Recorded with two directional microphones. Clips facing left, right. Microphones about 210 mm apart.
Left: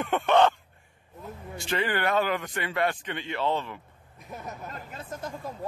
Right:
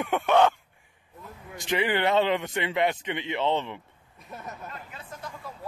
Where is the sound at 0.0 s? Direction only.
10° right (ahead or behind).